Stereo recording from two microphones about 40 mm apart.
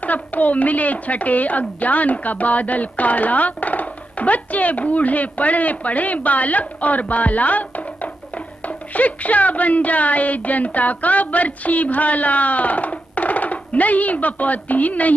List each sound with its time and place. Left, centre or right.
0.0 s a woman's voice: left